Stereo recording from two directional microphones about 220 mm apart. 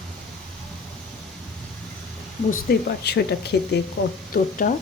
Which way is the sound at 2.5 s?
45° left (ahead or behind).